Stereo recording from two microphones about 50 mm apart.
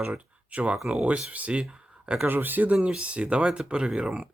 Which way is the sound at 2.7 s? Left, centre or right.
Centre.